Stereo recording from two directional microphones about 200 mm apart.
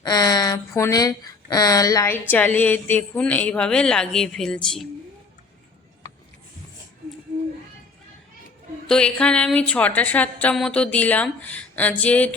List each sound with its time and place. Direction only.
0.0 s speech: 20° left (ahead or behind); by 4.9 s centre (ahead or behind)
8.9 s speech: 5° left (ahead or behind)